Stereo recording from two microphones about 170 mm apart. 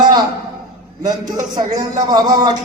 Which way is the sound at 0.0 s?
25° right (ahead or behind).